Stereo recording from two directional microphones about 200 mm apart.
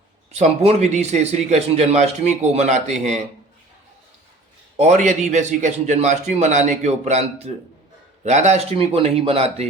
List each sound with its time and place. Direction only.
0.3 s a man's voice: 30° right (ahead or behind)
4.8 s a man's voice: 35° right (ahead or behind)